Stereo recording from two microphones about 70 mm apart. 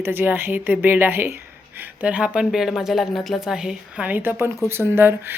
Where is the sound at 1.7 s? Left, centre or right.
Right.